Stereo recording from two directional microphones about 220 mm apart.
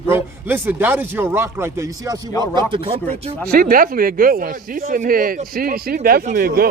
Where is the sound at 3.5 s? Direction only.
40° right (ahead or behind).